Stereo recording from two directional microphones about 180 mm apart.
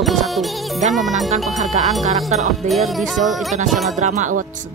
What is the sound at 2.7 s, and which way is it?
Music, centre (ahead or behind).